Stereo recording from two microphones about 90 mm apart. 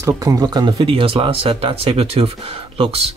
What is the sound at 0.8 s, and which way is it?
Speech, 85° right.